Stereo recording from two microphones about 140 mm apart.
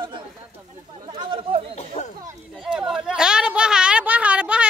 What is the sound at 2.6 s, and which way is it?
Speech, 5° right (ahead or behind).